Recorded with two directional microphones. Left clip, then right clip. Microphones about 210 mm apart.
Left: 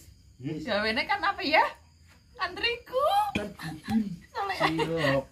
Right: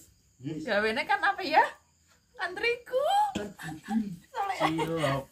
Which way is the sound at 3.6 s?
15° right (ahead or behind).